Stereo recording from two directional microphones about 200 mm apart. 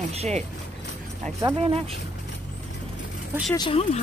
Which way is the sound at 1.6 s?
30° right (ahead or behind).